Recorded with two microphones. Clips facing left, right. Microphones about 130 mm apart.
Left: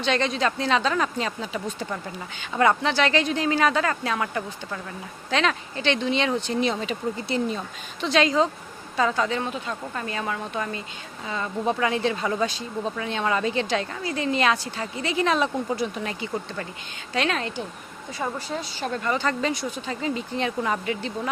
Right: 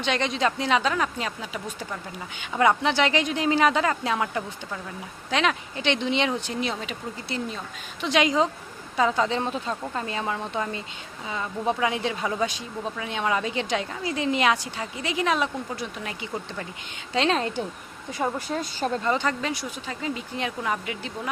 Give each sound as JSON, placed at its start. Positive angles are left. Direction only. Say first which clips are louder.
{"t": 0.0, "sound": "speech", "louder": "left 1 dB", "side_deg": -15}
{"t": 6.5, "sound": "speech", "louder": "left 5 dB", "side_deg": -5}
{"t": 8.0, "sound": "a woman's voice", "louder": "left 1 dB", "side_deg": -15}
{"t": 15.8, "sound": "speech", "louder": "left 6 dB", "side_deg": 5}
{"t": 17.2, "sound": "a woman's voice", "louder": "right 2 dB", "side_deg": -25}
{"t": 18.3, "sound": "speech", "louder": "right 2 dB", "side_deg": -50}
{"t": 19.0, "sound": "a woman's voice", "louder": "left 1 dB", "side_deg": -20}
{"t": 19.3, "sound": "speech", "louder": "left 3 dB", "side_deg": -5}